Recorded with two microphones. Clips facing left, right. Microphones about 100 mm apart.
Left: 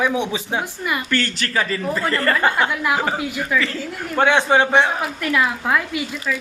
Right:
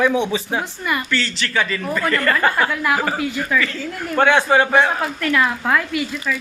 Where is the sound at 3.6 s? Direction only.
30° left (ahead or behind).